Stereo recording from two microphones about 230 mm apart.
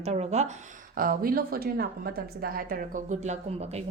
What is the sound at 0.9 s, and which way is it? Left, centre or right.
A woman's voice, right.